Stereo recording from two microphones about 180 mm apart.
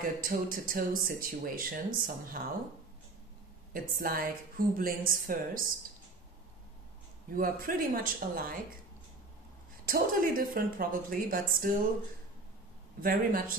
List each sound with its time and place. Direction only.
0.0 s speech: 50° right (ahead or behind)
3.7 s speech: 50° right (ahead or behind)
7.2 s speech: 50° right (ahead or behind)
9.8 s speech: 50° right (ahead or behind)
13.0 s speech: 50° right (ahead or behind)